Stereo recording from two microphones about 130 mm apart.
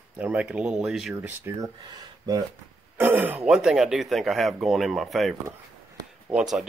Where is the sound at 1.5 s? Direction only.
20° right (ahead or behind).